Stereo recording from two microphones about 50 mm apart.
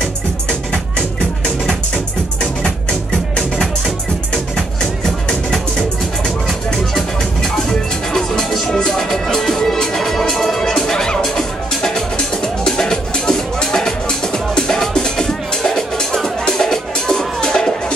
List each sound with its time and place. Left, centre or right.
2.6 s music: centre
5.3 s music: centre
8.1 s music: centre